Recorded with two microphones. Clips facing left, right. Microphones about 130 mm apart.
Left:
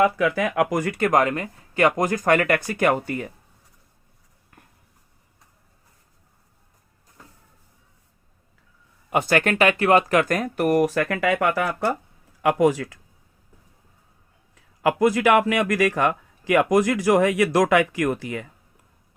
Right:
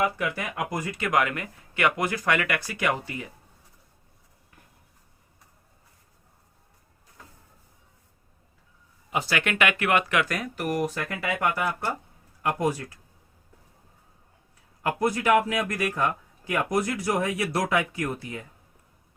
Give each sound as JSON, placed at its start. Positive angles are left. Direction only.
{"t": 0.0, "sound": "speech", "side_deg": 90}
{"t": 0.9, "sound": "speech", "side_deg": 45}
{"t": 9.0, "sound": "speech", "side_deg": 50}
{"t": 10.8, "sound": "speech", "side_deg": 85}
{"t": 14.5, "sound": "speech", "side_deg": 90}